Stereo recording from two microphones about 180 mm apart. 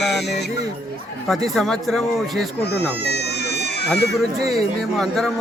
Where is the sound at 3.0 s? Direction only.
65° left (ahead or behind).